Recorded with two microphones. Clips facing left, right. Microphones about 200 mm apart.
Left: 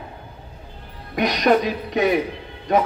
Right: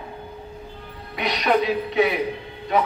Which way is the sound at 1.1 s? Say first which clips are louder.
Left 4 dB; 45° left (ahead or behind).